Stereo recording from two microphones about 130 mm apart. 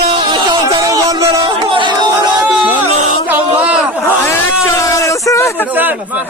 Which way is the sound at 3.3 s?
10° right (ahead or behind).